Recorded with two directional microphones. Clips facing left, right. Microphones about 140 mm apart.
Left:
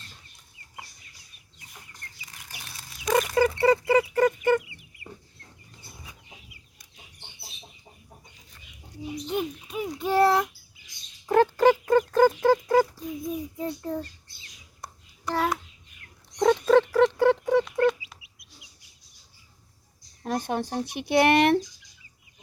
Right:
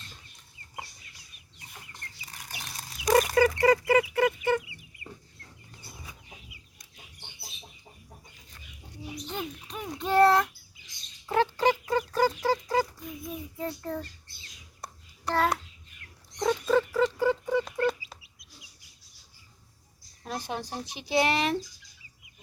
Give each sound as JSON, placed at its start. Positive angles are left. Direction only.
{"t": 2.2, "sound": "bird flight", "side_deg": -35}
{"t": 3.1, "sound": "chicken", "side_deg": -35}
{"t": 3.3, "sound": "chicken", "side_deg": 30}
{"t": 9.3, "sound": "a sound", "side_deg": 10}
{"t": 11.3, "sound": "a sound", "side_deg": 45}
{"t": 13.6, "sound": "child singing", "side_deg": 15}
{"t": 16.4, "sound": "dog", "side_deg": 55}
{"t": 16.9, "sound": "patter", "side_deg": 70}
{"t": 17.7, "sound": "chicken", "side_deg": -40}
{"t": 20.2, "sound": "speech", "side_deg": 50}